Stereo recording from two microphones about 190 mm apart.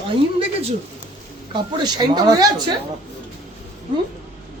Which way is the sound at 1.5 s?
25° right (ahead or behind).